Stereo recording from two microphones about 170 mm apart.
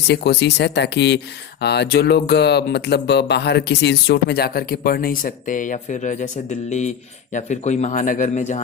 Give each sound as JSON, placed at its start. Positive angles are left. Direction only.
{"t": 0.1, "sound": "speech", "side_deg": 80}